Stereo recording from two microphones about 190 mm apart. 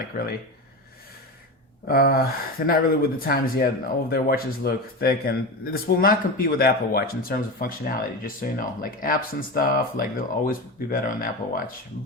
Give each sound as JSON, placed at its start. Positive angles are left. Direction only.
{"t": 0.1, "sound": "speech", "side_deg": 50}
{"t": 1.9, "sound": "speech", "side_deg": 50}